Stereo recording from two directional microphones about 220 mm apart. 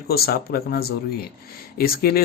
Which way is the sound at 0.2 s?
45° left (ahead or behind).